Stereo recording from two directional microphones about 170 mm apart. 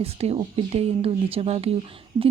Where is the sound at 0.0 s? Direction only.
35° right (ahead or behind).